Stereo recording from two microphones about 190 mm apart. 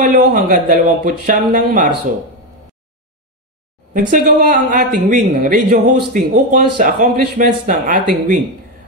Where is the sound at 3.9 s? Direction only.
45° right (ahead or behind).